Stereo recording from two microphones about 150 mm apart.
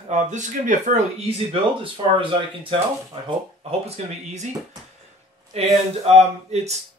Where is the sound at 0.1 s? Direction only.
55° right (ahead or behind).